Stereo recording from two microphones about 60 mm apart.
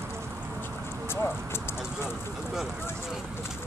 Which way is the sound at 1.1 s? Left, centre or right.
Left.